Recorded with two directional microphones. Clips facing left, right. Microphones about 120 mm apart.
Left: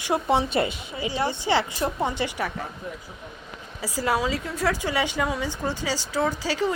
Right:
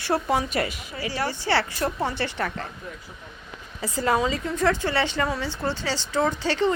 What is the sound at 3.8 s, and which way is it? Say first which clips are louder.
Speech: right 2 dB; 5° left (ahead or behind).